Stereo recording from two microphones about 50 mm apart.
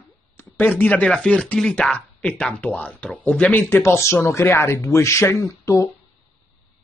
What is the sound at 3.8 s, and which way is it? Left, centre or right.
Speech, left.